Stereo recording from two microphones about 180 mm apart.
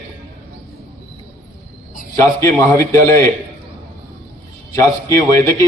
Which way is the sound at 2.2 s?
15° left (ahead or behind).